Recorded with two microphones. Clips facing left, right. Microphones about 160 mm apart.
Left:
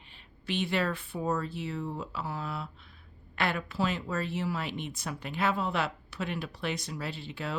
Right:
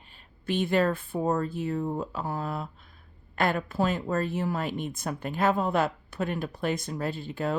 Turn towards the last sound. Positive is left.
turn(degrees=-50)  # may be behind; listen again after turning